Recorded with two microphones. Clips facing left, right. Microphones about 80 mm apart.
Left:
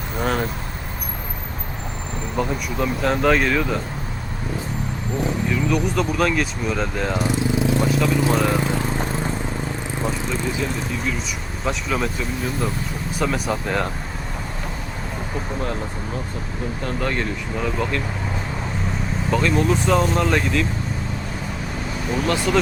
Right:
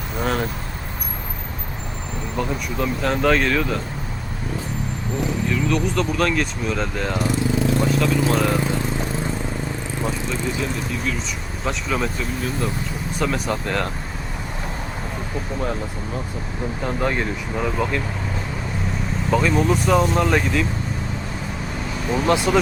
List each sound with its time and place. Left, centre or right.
0.2 s vehicle: centre
2.4 s speech: centre
5.5 s speech: centre
7.2 s vehicle: centre
7.9 s speech: centre
11.6 s speech: centre
13.1 s speech: centre
16.8 s speech: centre
19.3 s speech: centre
22.3 s speech: centre